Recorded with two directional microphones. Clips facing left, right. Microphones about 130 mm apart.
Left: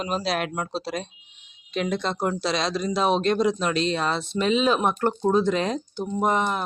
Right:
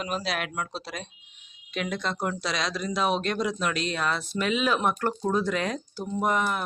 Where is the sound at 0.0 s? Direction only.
30° left (ahead or behind).